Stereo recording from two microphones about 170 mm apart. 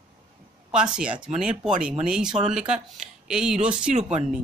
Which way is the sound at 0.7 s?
5° right (ahead or behind).